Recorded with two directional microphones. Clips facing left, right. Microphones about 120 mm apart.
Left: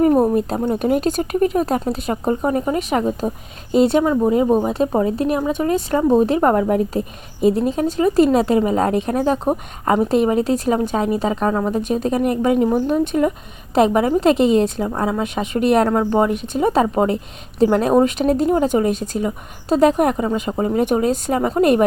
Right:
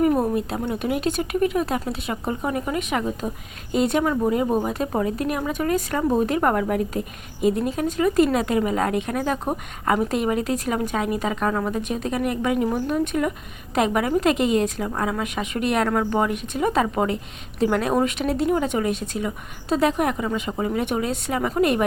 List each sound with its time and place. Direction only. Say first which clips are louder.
0.0 s a woman's voice: left 5 dB; 35° left (ahead or behind)